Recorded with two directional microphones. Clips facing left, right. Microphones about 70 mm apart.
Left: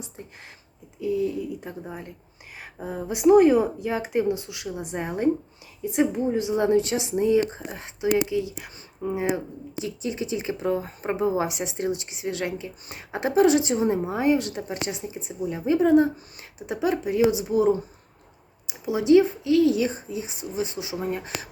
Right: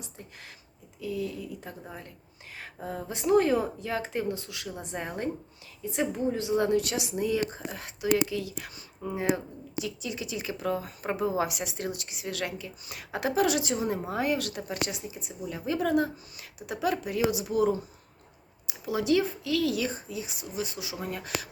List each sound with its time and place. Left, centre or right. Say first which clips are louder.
0.9 s speech: left 8 dB; left
9.8 s speech: left 9 dB; left